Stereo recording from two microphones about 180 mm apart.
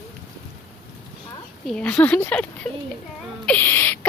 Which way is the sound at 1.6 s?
5° left (ahead or behind).